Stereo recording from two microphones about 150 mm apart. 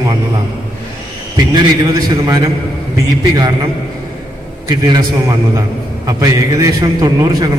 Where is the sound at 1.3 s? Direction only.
30° right (ahead or behind).